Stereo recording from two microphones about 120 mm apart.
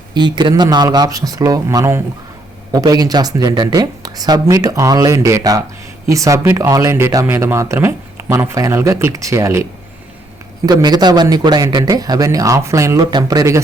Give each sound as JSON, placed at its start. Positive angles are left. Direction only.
{"t": 0.1, "sound": "speech", "side_deg": -40}
{"t": 10.7, "sound": "speech", "side_deg": -35}